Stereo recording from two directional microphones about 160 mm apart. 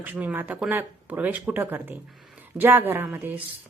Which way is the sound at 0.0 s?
10° right (ahead or behind).